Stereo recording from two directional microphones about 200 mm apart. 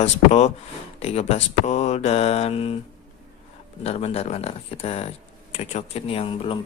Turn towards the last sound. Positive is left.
turn(degrees=25)  # may be behind; listen again after turning